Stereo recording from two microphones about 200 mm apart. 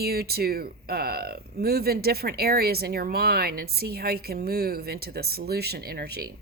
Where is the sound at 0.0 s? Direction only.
50° right (ahead or behind).